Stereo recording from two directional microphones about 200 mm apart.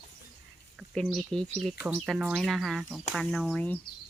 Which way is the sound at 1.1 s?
Centre (ahead or behind).